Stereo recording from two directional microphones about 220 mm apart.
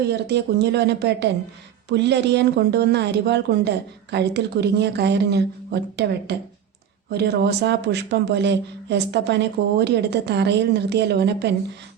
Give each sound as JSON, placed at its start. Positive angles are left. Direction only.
{"t": 0.0, "sound": "speech", "side_deg": -50}